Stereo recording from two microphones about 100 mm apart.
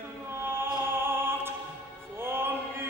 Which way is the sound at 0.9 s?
25° right (ahead or behind).